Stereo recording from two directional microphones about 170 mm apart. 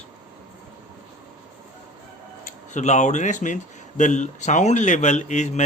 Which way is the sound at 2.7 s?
45° left (ahead or behind).